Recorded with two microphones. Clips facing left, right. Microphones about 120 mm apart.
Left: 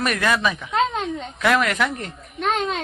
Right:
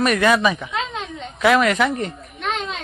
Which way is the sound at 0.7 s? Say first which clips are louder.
Left 5 dB; 45° left (ahead or behind).